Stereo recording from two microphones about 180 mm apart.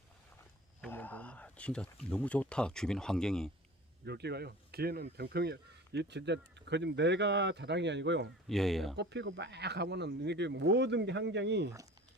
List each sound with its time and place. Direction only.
0.8 s speech: 10° left (ahead or behind)
4.0 s speech: 65° right (ahead or behind)
8.4 s speech: centre (ahead or behind)
9.0 s speech: 75° right (ahead or behind)